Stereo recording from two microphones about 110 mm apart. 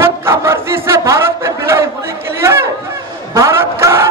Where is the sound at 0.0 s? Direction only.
25° right (ahead or behind).